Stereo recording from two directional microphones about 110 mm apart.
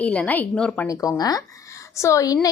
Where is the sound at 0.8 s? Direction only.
30° left (ahead or behind).